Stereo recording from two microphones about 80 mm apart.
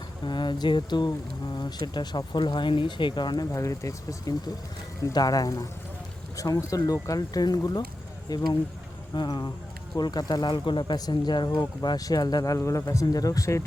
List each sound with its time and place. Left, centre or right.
0.3 s speech: left
3.5 s speech: left
10.9 s speech: left
11.4 s speech: left
11.8 s speech: left
12.5 s speech: left